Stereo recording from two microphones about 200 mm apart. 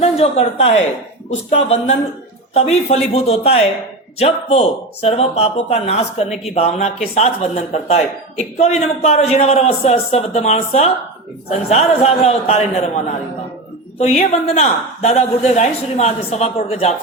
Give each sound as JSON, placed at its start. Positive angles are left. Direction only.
{"t": 0.0, "sound": "a woman's voice", "side_deg": 30}
{"t": 14.0, "sound": "a woman's voice", "side_deg": 35}